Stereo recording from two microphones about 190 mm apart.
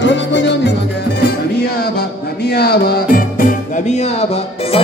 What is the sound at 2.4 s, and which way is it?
Music, 55° left (ahead or behind).